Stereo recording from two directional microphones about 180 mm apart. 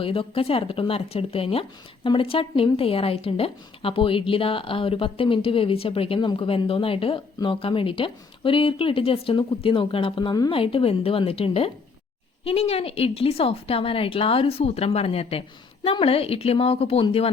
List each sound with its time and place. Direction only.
0.0 s a woman's voice: 30° left (ahead or behind)